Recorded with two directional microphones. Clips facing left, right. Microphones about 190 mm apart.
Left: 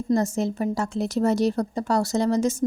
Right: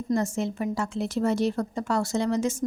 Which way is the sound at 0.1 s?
40° left (ahead or behind).